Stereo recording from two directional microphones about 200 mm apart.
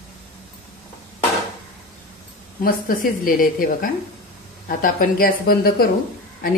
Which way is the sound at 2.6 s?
45° left (ahead or behind).